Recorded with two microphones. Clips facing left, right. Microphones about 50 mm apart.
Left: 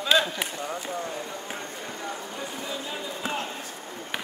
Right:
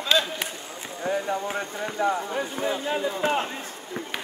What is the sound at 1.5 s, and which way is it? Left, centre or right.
Speech, right.